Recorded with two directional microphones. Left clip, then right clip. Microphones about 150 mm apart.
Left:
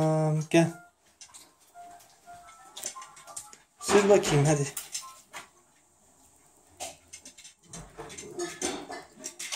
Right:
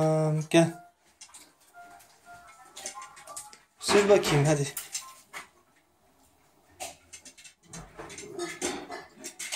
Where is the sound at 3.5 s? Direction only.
15° left (ahead or behind).